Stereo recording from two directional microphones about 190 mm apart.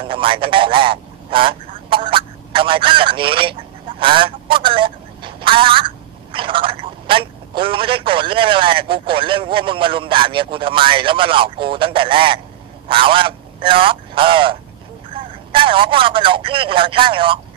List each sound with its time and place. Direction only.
0.0 s a man's voice: 30° right (ahead or behind)